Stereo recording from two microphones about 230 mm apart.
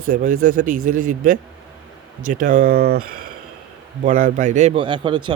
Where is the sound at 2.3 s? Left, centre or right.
Right.